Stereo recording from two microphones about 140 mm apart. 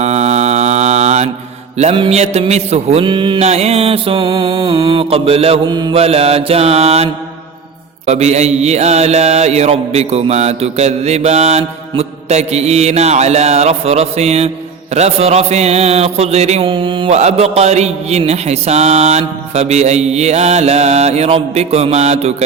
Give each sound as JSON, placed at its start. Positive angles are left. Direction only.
{"t": 0.0, "sound": "mantra", "side_deg": -50}
{"t": 3.1, "sound": "mantra", "side_deg": -35}
{"t": 3.4, "sound": "mantra", "side_deg": -50}
{"t": 5.6, "sound": "mantra", "side_deg": -30}
{"t": 6.0, "sound": "mantra", "side_deg": -45}
{"t": 17.2, "sound": "mantra", "side_deg": -50}